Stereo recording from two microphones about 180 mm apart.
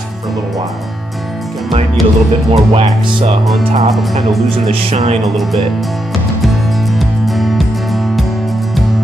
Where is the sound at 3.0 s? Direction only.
25° right (ahead or behind).